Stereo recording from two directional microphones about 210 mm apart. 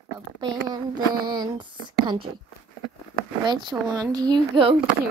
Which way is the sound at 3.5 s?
20° right (ahead or behind).